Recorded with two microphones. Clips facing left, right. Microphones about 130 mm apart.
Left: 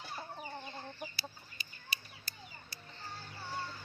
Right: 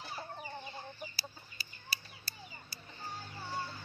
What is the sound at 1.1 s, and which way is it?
Chicken, 35° right (ahead or behind).